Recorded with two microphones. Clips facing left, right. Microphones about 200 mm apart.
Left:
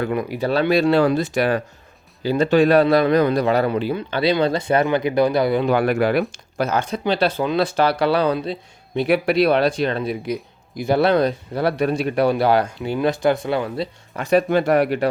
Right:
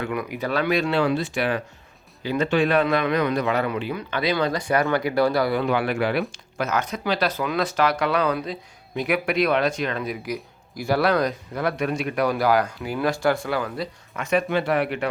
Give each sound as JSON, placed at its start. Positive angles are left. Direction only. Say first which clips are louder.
{"t": 0.0, "sound": "a man's voice", "louder": "left 5 dB", "side_deg": 30}
{"t": 5.6, "sound": "speech", "louder": "left 5 dB", "side_deg": 45}
{"t": 6.6, "sound": "a man's voice", "louder": "left 4 dB", "side_deg": 30}